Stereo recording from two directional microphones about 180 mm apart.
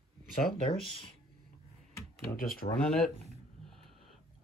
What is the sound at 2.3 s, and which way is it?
Speech, 55° left (ahead or behind).